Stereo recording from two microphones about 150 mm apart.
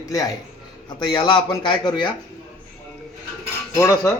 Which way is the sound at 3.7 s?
20° left (ahead or behind).